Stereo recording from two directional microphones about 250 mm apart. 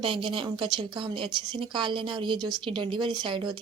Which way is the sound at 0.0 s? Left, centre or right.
Right.